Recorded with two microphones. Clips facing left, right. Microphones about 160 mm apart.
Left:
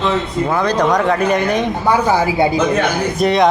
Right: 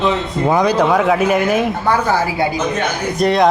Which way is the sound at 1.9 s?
15° left (ahead or behind).